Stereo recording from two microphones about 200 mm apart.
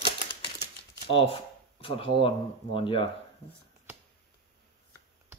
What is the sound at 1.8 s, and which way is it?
Speech, 25° left (ahead or behind).